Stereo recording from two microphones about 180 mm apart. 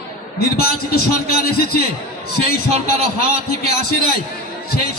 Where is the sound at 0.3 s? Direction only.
60° left (ahead or behind).